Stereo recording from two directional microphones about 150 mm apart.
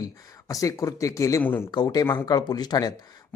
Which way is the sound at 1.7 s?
25° left (ahead or behind).